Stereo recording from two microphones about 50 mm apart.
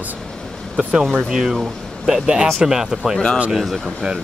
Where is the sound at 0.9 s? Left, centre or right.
Centre.